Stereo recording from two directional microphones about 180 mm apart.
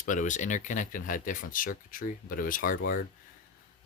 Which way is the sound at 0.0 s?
45° left (ahead or behind).